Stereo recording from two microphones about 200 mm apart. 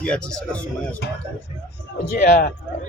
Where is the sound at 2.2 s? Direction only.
40° left (ahead or behind).